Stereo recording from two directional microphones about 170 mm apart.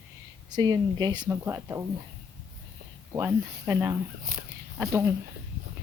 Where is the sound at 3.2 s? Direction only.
15° right (ahead or behind).